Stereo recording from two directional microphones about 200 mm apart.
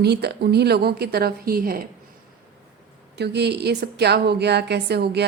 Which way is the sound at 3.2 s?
55° right (ahead or behind).